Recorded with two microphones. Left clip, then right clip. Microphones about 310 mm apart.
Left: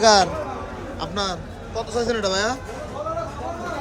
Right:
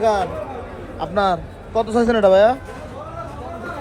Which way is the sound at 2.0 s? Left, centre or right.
Centre.